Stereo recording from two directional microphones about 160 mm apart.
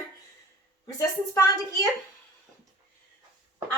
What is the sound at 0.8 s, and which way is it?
A woman's voice, 20° left (ahead or behind).